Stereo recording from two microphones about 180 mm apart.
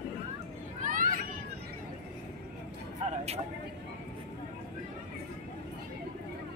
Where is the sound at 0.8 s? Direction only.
50° right (ahead or behind).